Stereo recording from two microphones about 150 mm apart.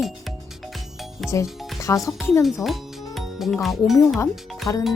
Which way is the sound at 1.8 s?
20° left (ahead or behind).